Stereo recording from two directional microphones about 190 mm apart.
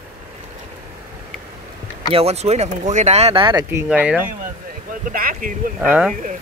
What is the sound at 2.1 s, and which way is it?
Speech, 35° right (ahead or behind).